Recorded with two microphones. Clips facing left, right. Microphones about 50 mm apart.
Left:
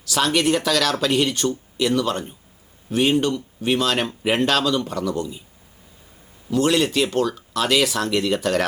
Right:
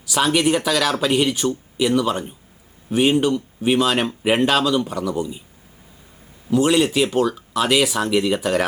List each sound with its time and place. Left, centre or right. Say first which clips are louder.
0.0 s speech: right 2 dB; centre
6.5 s speech: right 2 dB; centre